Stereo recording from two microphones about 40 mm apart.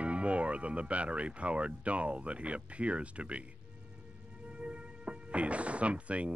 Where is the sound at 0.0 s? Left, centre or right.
Right.